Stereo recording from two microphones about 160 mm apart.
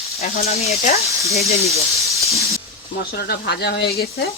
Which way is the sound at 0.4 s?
40° left (ahead or behind).